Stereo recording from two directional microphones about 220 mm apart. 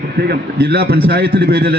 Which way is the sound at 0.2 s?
45° right (ahead or behind).